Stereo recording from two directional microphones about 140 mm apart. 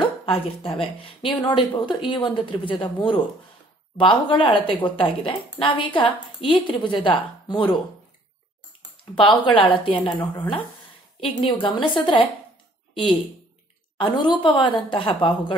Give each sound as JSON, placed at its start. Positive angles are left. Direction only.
{"t": 0.0, "sound": "speech", "side_deg": 40}
{"t": 9.1, "sound": "a woman's voice", "side_deg": 35}
{"t": 13.9, "sound": "speech", "side_deg": 35}